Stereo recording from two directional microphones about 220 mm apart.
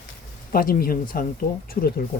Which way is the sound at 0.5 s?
40° left (ahead or behind).